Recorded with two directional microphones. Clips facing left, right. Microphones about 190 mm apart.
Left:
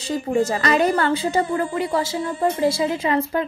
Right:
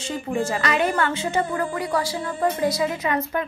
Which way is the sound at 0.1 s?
40° left (ahead or behind).